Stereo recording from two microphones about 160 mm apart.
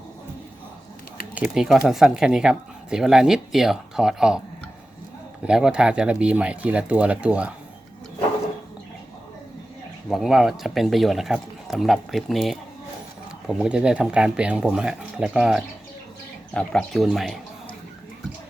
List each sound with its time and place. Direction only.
1.4 s speech: 5° right (ahead or behind)
5.5 s speech: 5° right (ahead or behind)
10.1 s speech: centre (ahead or behind)